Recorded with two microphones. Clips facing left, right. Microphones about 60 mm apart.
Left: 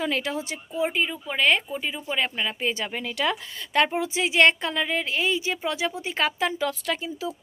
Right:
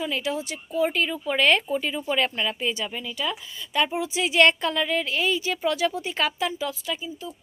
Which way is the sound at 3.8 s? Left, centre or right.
Left.